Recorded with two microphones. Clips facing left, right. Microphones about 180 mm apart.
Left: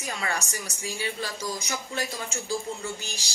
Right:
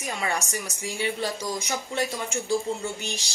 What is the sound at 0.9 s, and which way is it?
Speech, 25° right (ahead or behind).